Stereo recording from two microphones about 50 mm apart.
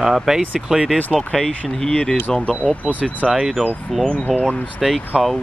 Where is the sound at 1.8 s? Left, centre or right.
Centre.